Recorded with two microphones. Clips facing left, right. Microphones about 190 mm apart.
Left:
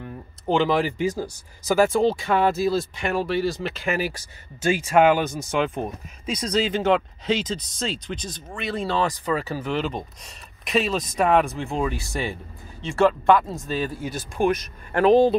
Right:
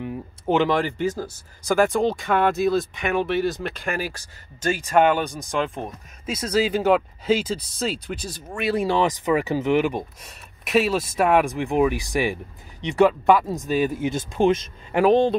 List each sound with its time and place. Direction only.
0.0 s a sound: 15° right (ahead or behind)
0.6 s speech: 5° left (ahead or behind)
1.8 s speech: 5° left (ahead or behind); by 15.0 s 25° right (ahead or behind)
15.0 s speech: 5° left (ahead or behind)